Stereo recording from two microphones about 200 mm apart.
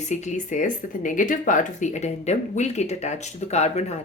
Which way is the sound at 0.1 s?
35° left (ahead or behind).